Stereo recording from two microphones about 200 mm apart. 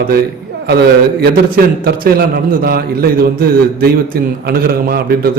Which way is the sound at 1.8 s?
50° right (ahead or behind).